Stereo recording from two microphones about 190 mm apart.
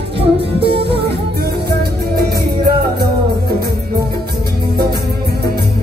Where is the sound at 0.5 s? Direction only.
30° right (ahead or behind).